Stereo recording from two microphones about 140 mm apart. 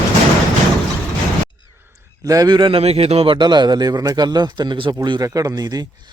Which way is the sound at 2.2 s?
25° right (ahead or behind).